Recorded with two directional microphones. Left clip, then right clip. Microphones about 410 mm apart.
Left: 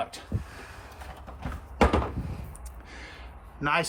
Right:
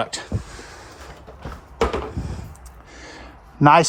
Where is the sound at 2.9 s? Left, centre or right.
Centre.